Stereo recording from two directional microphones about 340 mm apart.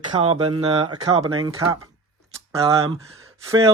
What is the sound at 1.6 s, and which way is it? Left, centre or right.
Speech, centre.